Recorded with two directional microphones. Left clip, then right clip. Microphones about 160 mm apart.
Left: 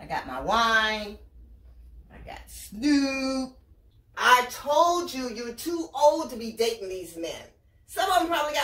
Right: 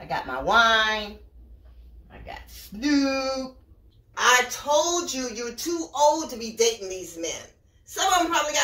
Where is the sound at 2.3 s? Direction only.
5° right (ahead or behind).